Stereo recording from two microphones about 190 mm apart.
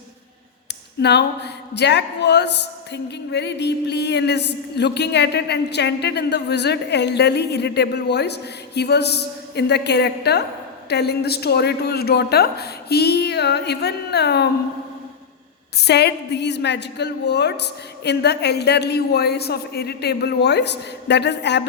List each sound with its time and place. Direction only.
1.0 s speech: 60° left (ahead or behind)
15.8 s speech: 60° left (ahead or behind)